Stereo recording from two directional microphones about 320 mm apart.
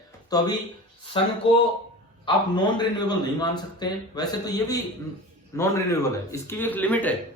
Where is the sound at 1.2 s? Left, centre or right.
Centre.